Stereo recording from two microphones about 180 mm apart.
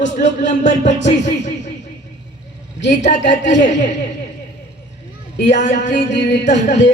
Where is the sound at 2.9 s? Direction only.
40° left (ahead or behind).